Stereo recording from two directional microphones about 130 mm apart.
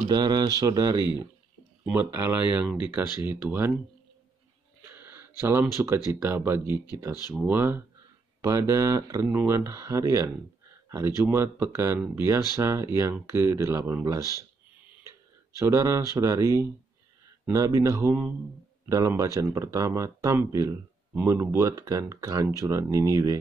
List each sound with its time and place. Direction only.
0.1 s speech: 30° right (ahead or behind)
1.9 s speech: 15° right (ahead or behind)
4.9 s a sound: 15° right (ahead or behind)
5.4 s speech: 20° right (ahead or behind)
15.6 s speech: 25° right (ahead or behind)